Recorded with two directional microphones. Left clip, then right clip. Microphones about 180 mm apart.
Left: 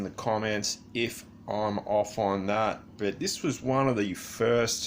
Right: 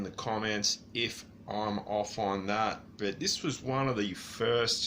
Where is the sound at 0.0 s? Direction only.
35° left (ahead or behind).